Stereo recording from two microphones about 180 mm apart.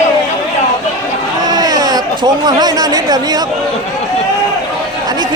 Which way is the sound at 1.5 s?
20° right (ahead or behind).